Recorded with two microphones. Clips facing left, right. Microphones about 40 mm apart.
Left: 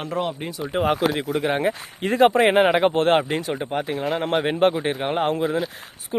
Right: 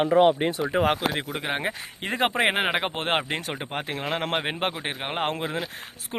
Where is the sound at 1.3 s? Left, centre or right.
Right.